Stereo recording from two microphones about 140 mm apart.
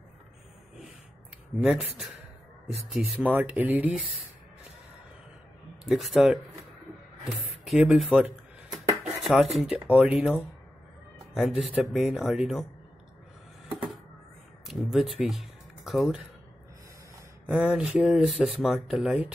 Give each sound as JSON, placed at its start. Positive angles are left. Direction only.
{"t": 1.6, "sound": "speech", "side_deg": -5}
{"t": 5.9, "sound": "speech", "side_deg": 0}
{"t": 7.6, "sound": "a sound", "side_deg": 0}
{"t": 9.2, "sound": "speech", "side_deg": 0}
{"t": 14.7, "sound": "speech", "side_deg": 0}
{"t": 17.5, "sound": "speech", "side_deg": -5}